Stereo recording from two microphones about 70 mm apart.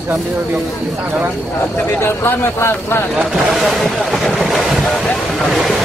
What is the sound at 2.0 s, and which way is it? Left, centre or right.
Speech, left.